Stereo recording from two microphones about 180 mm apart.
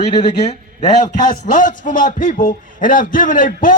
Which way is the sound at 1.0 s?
45° left (ahead or behind).